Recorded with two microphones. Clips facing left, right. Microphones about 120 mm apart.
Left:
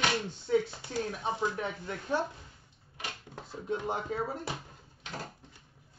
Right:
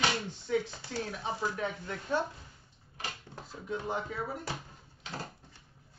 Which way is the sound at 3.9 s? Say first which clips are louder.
Left 2 dB; 35° left (ahead or behind).